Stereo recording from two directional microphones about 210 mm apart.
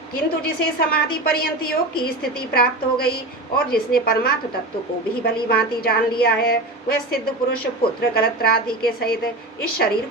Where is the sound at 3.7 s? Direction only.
45° left (ahead or behind).